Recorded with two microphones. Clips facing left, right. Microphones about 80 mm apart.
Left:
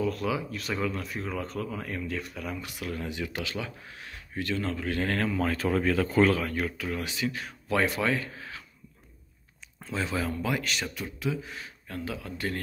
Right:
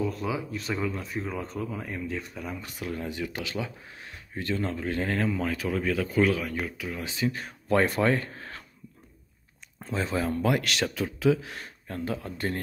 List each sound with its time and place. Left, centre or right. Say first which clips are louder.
0.0 s speech: left 1 dB; right
7.1 s speech: right 2 dB; right
9.8 s speech: right 2 dB; right
10.6 s speech: right 4 dB; right
11.3 s speech: right 9 dB; right